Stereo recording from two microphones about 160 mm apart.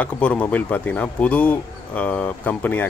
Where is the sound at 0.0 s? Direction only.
10° left (ahead or behind).